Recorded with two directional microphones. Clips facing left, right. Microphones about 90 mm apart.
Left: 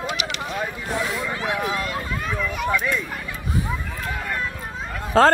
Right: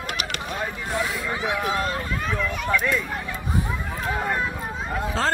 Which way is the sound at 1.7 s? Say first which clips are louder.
Right 2 dB; 35° right (ahead or behind).